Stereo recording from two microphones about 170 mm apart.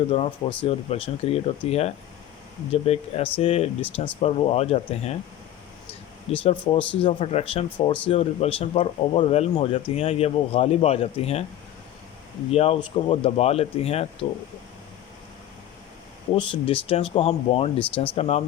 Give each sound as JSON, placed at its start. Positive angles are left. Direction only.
{"t": 0.1, "sound": "speech", "side_deg": 30}
{"t": 12.5, "sound": "speech", "side_deg": 35}
{"t": 16.3, "sound": "speech", "side_deg": 30}
{"t": 17.7, "sound": "speech", "side_deg": 10}
{"t": 18.1, "sound": "speech", "side_deg": 40}